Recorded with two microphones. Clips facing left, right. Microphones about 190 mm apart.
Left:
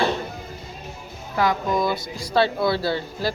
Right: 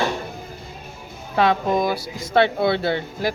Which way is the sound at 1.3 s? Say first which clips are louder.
Right 3 dB; 25° right (ahead or behind).